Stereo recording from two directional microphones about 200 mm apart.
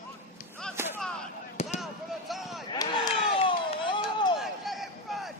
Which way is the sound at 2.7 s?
20° left (ahead or behind).